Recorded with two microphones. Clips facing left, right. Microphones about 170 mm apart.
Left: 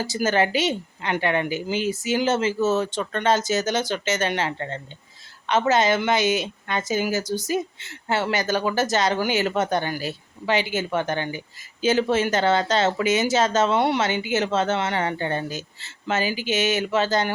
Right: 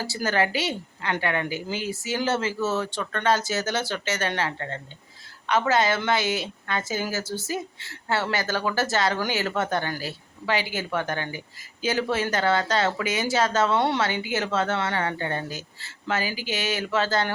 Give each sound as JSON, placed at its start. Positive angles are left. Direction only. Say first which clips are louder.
{"t": 0.0, "sound": "a woman's voice", "louder": "left 3 dB", "side_deg": 20}